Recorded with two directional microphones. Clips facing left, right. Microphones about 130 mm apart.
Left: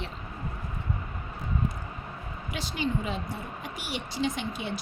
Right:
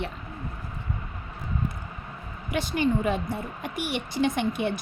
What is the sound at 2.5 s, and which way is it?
A woman's voice, 55° right (ahead or behind).